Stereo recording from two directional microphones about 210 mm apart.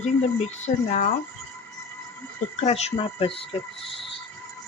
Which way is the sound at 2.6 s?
30° left (ahead or behind).